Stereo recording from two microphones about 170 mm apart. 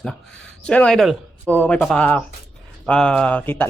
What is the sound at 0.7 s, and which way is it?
Speech, 5° left (ahead or behind).